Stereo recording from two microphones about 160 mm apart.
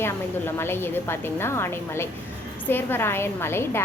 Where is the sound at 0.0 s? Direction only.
15° left (ahead or behind).